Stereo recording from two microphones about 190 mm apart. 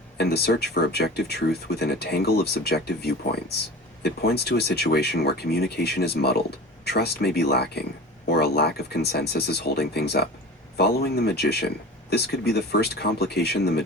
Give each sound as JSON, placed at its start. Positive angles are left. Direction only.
{"t": 0.2, "sound": "speech", "side_deg": 60}